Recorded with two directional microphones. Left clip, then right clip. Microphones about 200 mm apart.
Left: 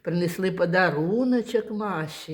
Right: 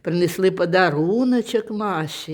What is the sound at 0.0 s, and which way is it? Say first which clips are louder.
Speech: right 7 dB; 45° right (ahead or behind).